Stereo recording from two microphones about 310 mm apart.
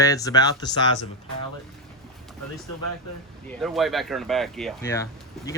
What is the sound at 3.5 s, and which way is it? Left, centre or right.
Speech, centre.